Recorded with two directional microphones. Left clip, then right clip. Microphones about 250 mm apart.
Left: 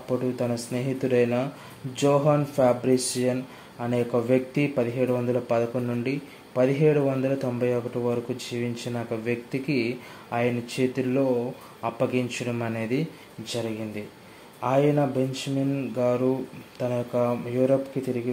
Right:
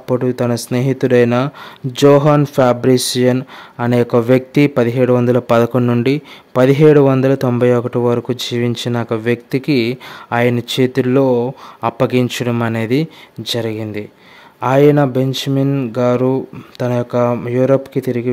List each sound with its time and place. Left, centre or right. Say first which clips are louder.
0.1 s speech: right 11 dB; right